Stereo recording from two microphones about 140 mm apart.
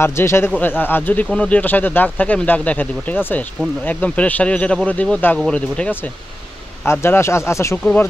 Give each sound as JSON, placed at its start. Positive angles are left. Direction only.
{"t": 0.0, "sound": "speech", "side_deg": 20}